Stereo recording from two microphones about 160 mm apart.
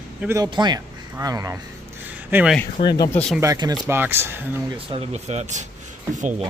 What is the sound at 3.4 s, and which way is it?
Speech, 25° right (ahead or behind).